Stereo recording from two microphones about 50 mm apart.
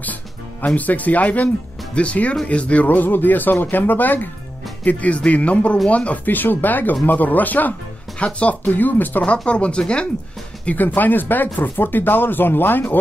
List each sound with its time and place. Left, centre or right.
0.0 s music: left
0.7 s speech: left
8.2 s speech: left
8.6 s speech: left
9.5 s speech: left
10.6 s speech: left